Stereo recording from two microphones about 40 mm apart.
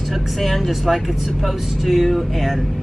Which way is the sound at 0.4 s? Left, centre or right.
Centre.